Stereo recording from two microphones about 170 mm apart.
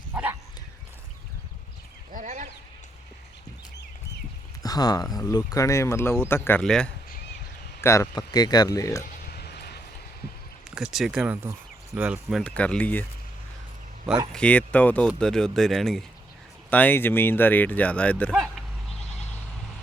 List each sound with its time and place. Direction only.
0.1 s bow-wow: 10° right (ahead or behind)
2.2 s a sound: 45° right (ahead or behind)
4.6 s speech: 20° left (ahead or behind)
9.2 s a sound: 70° left (ahead or behind)
10.8 s speech: centre (ahead or behind)
12.4 s speech: 5° left (ahead or behind)
14.3 s speech: 10° left (ahead or behind)